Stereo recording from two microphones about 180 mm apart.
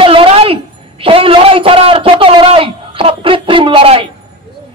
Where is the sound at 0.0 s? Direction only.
30° right (ahead or behind).